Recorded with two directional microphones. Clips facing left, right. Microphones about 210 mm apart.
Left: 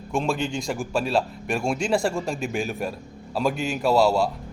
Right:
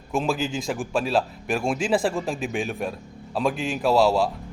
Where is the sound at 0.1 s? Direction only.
Centre (ahead or behind).